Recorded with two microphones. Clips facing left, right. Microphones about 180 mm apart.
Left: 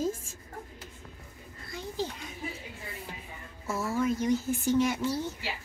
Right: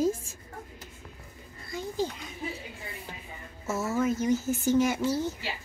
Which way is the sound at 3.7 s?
20° right (ahead or behind).